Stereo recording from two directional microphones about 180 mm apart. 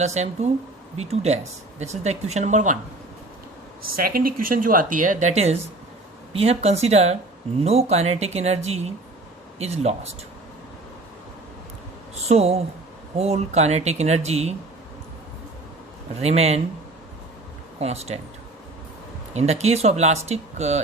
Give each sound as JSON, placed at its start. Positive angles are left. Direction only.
{"t": 0.0, "sound": "speech", "side_deg": -40}
{"t": 3.8, "sound": "speech", "side_deg": -55}
{"t": 12.3, "sound": "speech", "side_deg": -35}
{"t": 16.2, "sound": "speech", "side_deg": -35}
{"t": 17.7, "sound": "speech", "side_deg": -35}
{"t": 19.3, "sound": "speech", "side_deg": -35}